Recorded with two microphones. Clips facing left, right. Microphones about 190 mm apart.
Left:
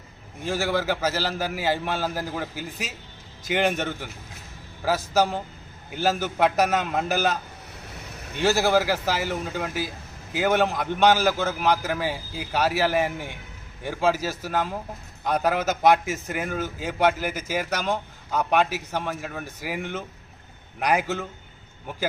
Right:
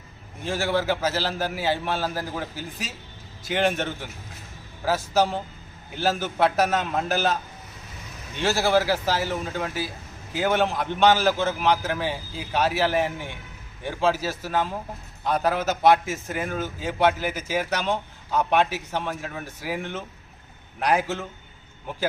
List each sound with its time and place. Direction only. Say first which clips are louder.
0.4 s a man's voice: even; 10° left (ahead or behind)
7.9 s vehicle: left 1 dB; 65° left (ahead or behind)
8.4 s a man's voice: left 1 dB; 10° left (ahead or behind)